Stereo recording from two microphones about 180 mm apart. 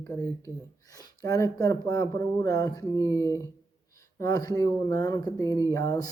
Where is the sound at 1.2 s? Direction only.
20° left (ahead or behind).